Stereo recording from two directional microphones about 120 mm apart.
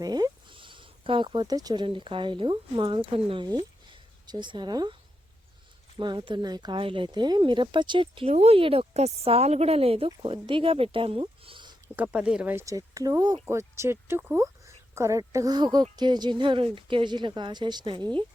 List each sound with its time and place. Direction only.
0.0 s speech: 35° right (ahead or behind)
4.3 s speech: 40° right (ahead or behind)
6.0 s speech: 40° right (ahead or behind)
8.3 s speech: 60° right (ahead or behind); by 11.8 s 40° right (ahead or behind)
11.9 s speech: 10° right (ahead or behind)
12.5 s speech: 30° right (ahead or behind); by 18.3 s 45° right (ahead or behind)